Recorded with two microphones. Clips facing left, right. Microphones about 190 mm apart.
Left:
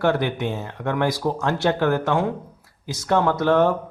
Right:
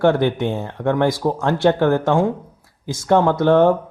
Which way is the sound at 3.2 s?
50° right (ahead or behind).